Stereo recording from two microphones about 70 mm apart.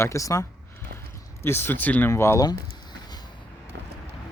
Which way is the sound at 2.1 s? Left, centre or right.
Left.